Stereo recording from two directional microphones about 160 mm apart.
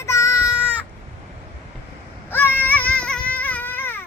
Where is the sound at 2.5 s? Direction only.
10° left (ahead or behind).